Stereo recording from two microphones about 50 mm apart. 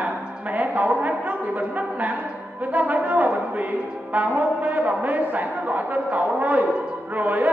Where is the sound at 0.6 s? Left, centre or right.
Right.